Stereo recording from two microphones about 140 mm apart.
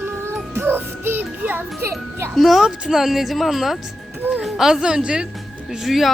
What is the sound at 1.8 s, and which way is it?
Speech, 20° right (ahead or behind).